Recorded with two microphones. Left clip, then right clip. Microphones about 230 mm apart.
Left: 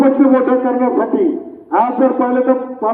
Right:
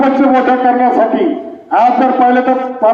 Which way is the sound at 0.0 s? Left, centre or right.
Right.